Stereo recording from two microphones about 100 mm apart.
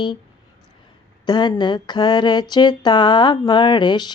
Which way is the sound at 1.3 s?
50° left (ahead or behind).